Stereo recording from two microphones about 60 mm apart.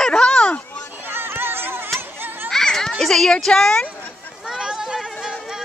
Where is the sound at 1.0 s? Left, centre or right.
Right.